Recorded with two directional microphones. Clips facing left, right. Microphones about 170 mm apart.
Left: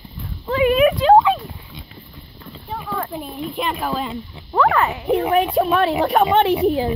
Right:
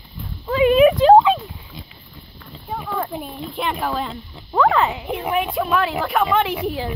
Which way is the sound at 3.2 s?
Centre (ahead or behind).